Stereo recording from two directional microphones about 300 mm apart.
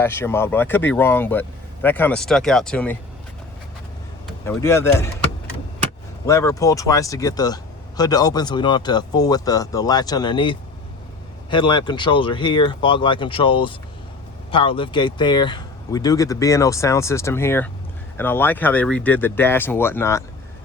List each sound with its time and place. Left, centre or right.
0.0 s speech: centre
4.4 s speech: centre
6.2 s speech: centre